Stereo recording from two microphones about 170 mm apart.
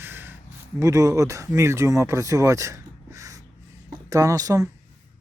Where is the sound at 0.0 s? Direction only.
10° right (ahead or behind).